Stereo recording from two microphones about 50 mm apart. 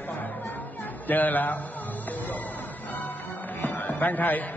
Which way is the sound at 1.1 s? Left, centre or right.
Left.